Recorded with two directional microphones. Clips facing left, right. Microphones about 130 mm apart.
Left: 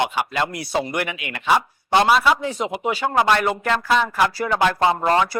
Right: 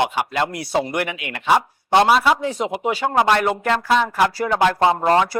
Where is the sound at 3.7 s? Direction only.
30° right (ahead or behind).